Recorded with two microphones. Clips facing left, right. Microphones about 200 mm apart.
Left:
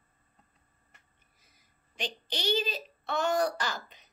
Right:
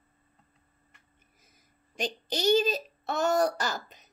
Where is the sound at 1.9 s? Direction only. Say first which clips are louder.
Right 5 dB; 45° right (ahead or behind).